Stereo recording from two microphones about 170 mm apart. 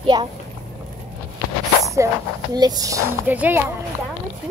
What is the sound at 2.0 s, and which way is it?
Speech, 15° right (ahead or behind).